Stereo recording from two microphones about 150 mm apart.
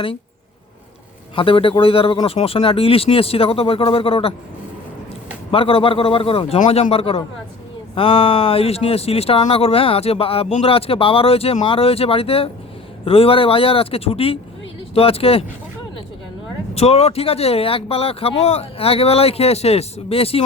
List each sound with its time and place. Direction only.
1.4 s speech: 35° left (ahead or behind)
5.5 s speech: 40° left (ahead or behind)
16.7 s speech: 40° left (ahead or behind)